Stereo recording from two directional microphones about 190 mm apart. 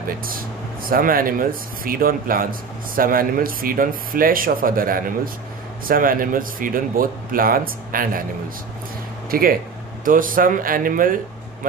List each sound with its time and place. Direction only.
0.2 s speech: 50° right (ahead or behind)
9.3 s speech: 50° right (ahead or behind)